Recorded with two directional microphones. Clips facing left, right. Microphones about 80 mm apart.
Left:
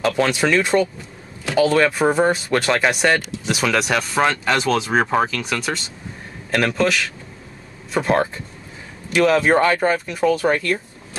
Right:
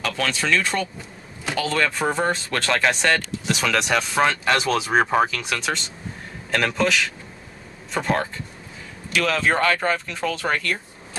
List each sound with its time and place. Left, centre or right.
0.0 s speech: centre
9.1 s speech: left